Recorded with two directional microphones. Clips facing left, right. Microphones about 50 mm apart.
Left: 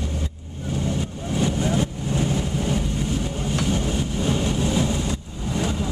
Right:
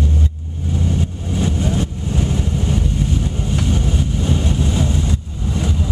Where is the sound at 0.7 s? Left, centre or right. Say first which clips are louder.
Right 4 dB; centre.